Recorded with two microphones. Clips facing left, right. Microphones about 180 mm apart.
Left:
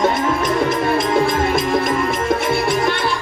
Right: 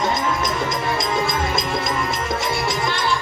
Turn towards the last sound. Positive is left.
turn(degrees=60)  # may be behind; listen again after turning